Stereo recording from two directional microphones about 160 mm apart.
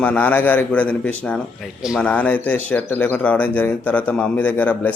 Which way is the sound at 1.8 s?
5° right (ahead or behind).